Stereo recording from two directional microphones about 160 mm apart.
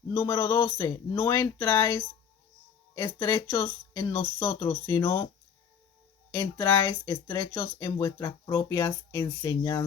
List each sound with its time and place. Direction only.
0.1 s speech: 20° left (ahead or behind)
3.5 s speech: 30° left (ahead or behind)
6.3 s speech: 20° left (ahead or behind)